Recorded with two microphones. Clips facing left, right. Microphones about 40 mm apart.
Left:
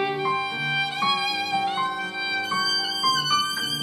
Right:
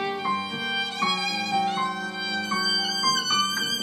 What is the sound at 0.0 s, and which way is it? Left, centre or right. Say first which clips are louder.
Violin: left 3 dB; centre.